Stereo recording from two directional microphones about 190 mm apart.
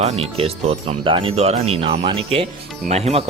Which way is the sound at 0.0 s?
35° right (ahead or behind).